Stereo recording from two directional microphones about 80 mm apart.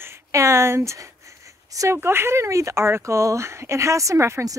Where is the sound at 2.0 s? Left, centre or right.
Right.